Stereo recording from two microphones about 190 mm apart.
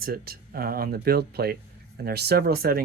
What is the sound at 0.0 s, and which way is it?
Speech, 50° right (ahead or behind).